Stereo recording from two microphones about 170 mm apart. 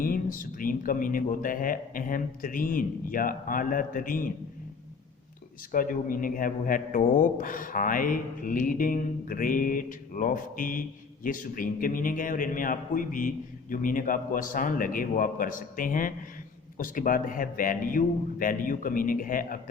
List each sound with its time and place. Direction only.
0.0 s a man's voice: 55° left (ahead or behind)
5.7 s a man's voice: 55° left (ahead or behind)